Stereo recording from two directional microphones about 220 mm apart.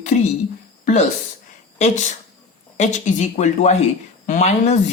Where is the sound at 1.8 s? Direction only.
35° left (ahead or behind).